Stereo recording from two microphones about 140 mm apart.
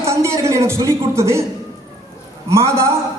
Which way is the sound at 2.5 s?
20° right (ahead or behind).